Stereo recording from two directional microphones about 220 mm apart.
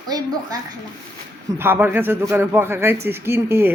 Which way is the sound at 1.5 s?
10° right (ahead or behind).